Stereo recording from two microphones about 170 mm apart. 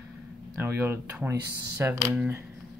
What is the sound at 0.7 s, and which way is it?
Speech, 10° right (ahead or behind).